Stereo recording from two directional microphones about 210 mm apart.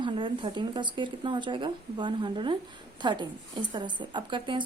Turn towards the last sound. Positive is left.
turn(degrees=-25)  # may be behind; listen again after turning